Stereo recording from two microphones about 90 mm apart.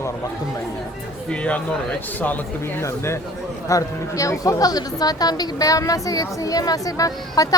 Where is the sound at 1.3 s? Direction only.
15° left (ahead or behind).